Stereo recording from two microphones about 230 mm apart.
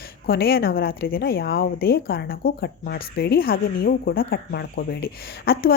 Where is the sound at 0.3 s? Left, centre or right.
Left.